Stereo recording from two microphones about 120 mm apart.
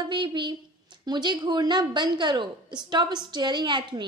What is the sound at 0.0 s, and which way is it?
A woman's voice, 40° right (ahead or behind).